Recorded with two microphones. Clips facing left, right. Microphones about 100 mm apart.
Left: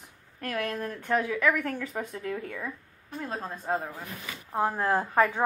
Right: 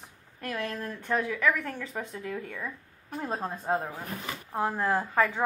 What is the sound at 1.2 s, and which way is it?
A woman's voice, 5° left (ahead or behind).